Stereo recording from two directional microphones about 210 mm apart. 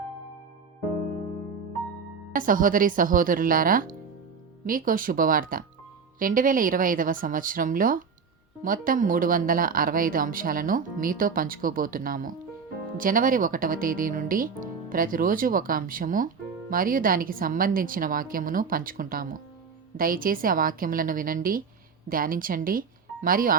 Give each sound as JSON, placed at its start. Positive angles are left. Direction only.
{"t": 2.3, "sound": "a woman's voice", "side_deg": -40}